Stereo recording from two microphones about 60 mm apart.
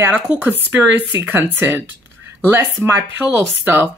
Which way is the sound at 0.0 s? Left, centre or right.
Right.